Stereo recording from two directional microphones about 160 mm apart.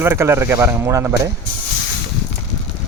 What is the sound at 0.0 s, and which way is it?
Speech, 15° right (ahead or behind).